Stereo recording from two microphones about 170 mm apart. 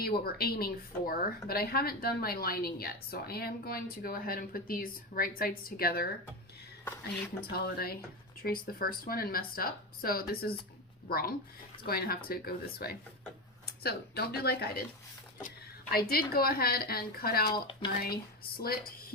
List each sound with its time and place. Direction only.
0.0 s a woman's voice: 65° left (ahead or behind)
7.5 s a woman's voice: 65° left (ahead or behind)
15.4 s a sound: 55° left (ahead or behind)
16.3 s a woman's voice: 65° left (ahead or behind)